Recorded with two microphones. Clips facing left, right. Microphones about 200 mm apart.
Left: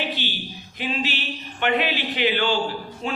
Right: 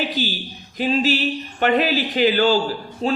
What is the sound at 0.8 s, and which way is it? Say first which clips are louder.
A man's voice: right 8 dB; 40° right (ahead or behind).